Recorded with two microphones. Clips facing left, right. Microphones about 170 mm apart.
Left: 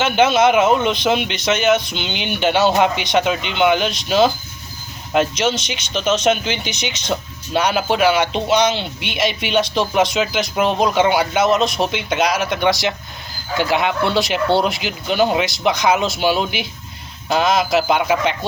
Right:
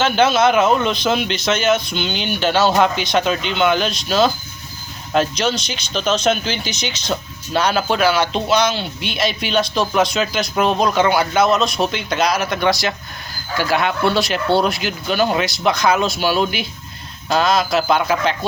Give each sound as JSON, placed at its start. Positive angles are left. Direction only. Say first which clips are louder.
{"t": 0.0, "sound": "speech", "louder": "even", "side_deg": 20}
{"t": 5.4, "sound": "speech", "louder": "left 1 dB", "side_deg": 20}